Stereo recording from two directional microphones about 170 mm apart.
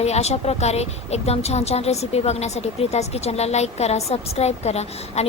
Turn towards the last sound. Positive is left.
turn(degrees=40)  # may be behind; listen again after turning